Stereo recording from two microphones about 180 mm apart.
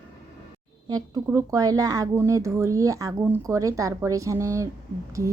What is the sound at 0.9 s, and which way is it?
Speech, 20° right (ahead or behind).